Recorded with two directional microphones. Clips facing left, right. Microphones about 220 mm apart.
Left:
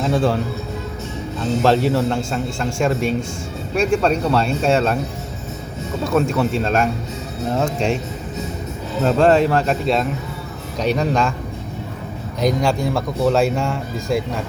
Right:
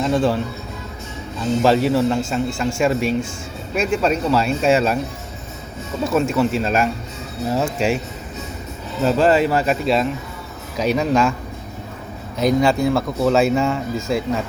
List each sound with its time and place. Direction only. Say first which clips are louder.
0.0 s speech: even; centre (ahead or behind)
1.6 s speech: right 1 dB; centre (ahead or behind)
6.1 s speech: even; 5° right (ahead or behind)
9.0 s speech: left 1 dB; 5° right (ahead or behind)
12.4 s speech: right 2 dB; 5° right (ahead or behind)